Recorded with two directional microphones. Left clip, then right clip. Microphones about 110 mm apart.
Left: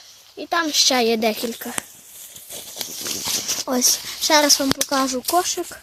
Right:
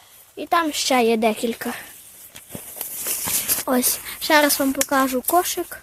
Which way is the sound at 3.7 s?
5° right (ahead or behind).